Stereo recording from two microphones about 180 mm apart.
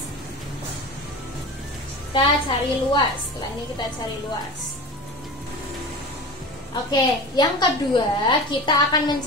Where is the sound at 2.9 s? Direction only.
25° left (ahead or behind).